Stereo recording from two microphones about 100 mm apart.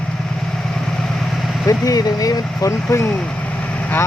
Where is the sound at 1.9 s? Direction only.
40° left (ahead or behind).